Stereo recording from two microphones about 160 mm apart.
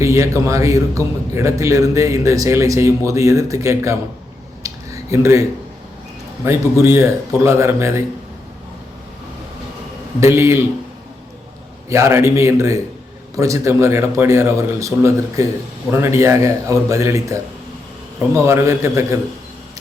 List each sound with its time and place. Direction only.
0.0 s a man's voice: 20° right (ahead or behind)
4.6 s a sound: 20° right (ahead or behind)
6.4 s speech: 15° right (ahead or behind)
10.2 s speech: 15° right (ahead or behind)
11.9 s a man's voice: 15° right (ahead or behind)